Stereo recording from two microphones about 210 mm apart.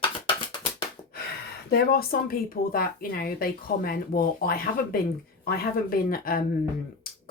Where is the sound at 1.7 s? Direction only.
45° left (ahead or behind).